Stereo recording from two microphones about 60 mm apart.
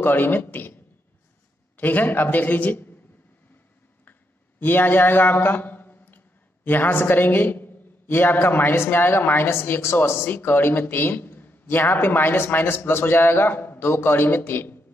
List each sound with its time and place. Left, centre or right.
0.0 s a man's voice: left
4.0 s a man's voice: left